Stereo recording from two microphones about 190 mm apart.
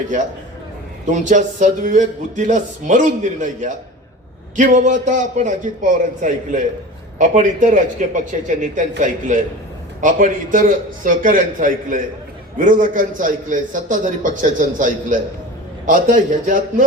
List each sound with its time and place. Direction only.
1.1 s a man's voice: 40° right (ahead or behind)